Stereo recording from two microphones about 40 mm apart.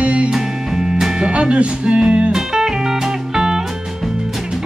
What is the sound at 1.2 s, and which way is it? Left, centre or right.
Speech, right.